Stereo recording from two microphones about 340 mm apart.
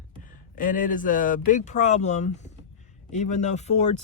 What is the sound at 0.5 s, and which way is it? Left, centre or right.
Speech, left.